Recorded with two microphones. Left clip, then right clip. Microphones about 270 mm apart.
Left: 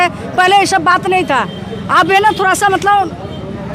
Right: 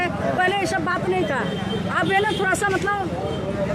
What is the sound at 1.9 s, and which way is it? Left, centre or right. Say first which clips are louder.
Speech: left 12 dB; left.